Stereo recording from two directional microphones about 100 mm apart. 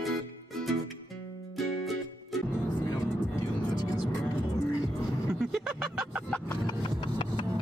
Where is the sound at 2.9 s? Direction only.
40° left (ahead or behind).